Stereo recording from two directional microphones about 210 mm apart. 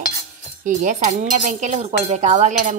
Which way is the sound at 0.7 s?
35° right (ahead or behind).